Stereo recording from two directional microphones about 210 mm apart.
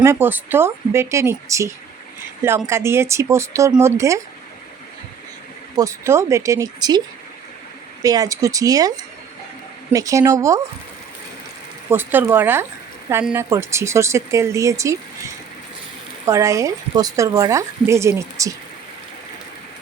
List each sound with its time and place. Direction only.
0.0 s speech: 10° right (ahead or behind)
5.7 s speech: 15° right (ahead or behind)
8.0 s speech: 15° right (ahead or behind)
9.9 s speech: 15° right (ahead or behind)
11.9 s speech: 10° right (ahead or behind)